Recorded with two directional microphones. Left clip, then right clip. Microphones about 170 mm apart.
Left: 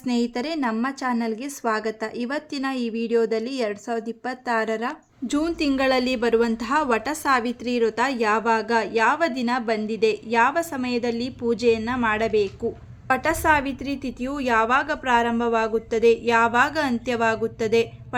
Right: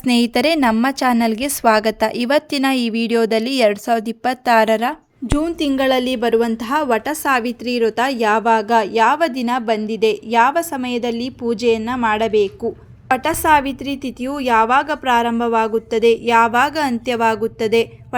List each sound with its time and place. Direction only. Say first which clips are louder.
0.0 s a woman's voice: right 10 dB; 55° right (ahead or behind)
5.3 s a woman's voice: right 4 dB; 25° right (ahead or behind)